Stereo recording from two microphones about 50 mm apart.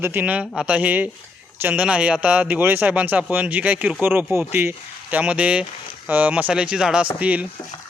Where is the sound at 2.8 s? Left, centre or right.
Right.